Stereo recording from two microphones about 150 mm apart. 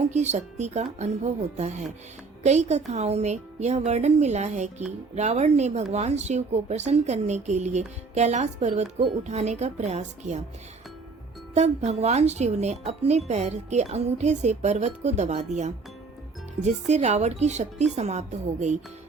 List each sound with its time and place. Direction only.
0.1 s speech: 50° right (ahead or behind)
11.5 s speech: 50° right (ahead or behind)
16.6 s speech: 50° right (ahead or behind)